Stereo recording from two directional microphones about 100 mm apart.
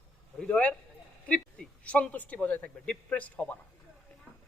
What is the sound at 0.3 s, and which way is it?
A man's voice, 10° left (ahead or behind).